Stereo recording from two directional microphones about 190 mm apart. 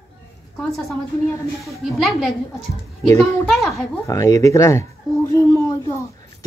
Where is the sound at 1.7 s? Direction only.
Centre (ahead or behind).